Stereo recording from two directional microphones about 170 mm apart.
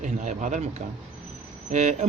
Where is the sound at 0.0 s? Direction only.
45° right (ahead or behind).